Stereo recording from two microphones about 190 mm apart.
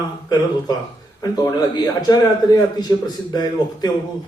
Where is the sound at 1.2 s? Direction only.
20° left (ahead or behind).